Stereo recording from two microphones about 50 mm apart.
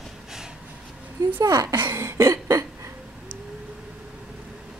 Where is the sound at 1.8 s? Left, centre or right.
Right.